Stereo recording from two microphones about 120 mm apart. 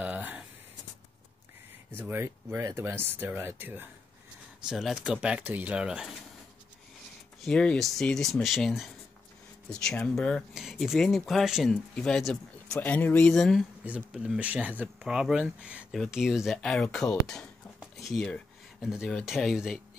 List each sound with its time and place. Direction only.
0.0 s a sound: 15° right (ahead or behind)
2.0 s speech: 20° right (ahead or behind)
4.6 s speech: 5° right (ahead or behind)
7.4 s speech: 10° left (ahead or behind)
12.8 s speech: 15° left (ahead or behind)
13.3 s speech: centre (ahead or behind)
13.8 s speech: 10° right (ahead or behind)